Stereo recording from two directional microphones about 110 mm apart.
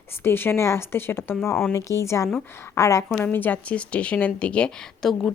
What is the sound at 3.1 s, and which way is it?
A woman's voice, 15° left (ahead or behind).